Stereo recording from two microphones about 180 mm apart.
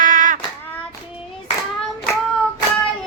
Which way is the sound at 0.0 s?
45° right (ahead or behind).